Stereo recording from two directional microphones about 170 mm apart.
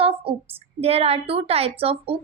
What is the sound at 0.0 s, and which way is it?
A woman's voice, 35° right (ahead or behind).